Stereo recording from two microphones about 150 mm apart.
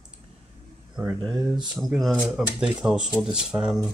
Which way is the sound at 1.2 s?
30° right (ahead or behind).